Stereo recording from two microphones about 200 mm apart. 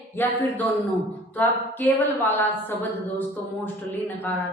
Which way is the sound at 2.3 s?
10° left (ahead or behind).